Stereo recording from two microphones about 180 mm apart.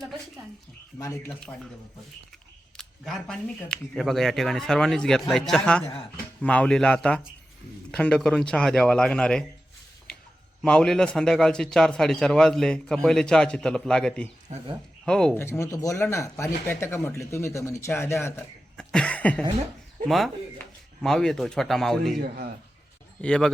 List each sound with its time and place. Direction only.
0.9 s speech: 15° left (ahead or behind)
2.7 s a man's voice: 5° left (ahead or behind)
10.6 s a man's voice: 5° left (ahead or behind)
15.4 s speech: 15° left (ahead or behind)
23.2 s a man's voice: 5° left (ahead or behind)